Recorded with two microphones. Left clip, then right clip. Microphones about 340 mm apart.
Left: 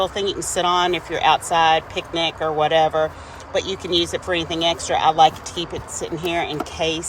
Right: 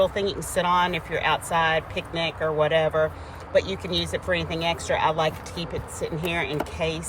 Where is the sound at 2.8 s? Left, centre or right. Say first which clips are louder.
Left 4 dB; left.